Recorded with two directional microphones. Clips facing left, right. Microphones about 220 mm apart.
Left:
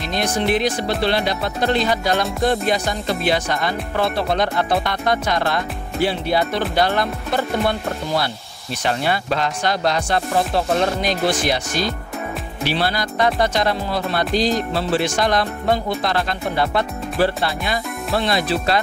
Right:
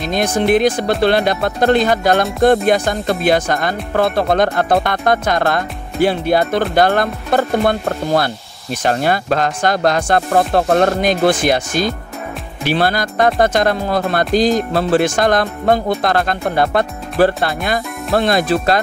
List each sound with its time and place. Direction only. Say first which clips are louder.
0.0 s speech: right 5 dB; 50° right (ahead or behind)